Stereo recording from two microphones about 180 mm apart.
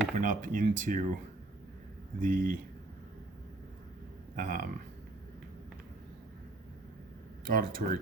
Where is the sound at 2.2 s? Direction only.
50° right (ahead or behind).